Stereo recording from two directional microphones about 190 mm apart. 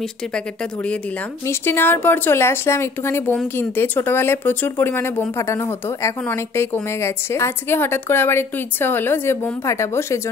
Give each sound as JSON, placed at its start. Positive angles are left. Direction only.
{"t": 1.5, "sound": "speech", "side_deg": 10}